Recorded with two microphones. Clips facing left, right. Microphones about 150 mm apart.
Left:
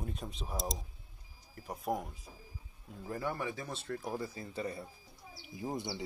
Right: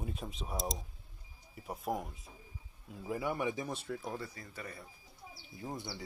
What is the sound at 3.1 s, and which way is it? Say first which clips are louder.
Speech: right 2 dB; 10° right (ahead or behind).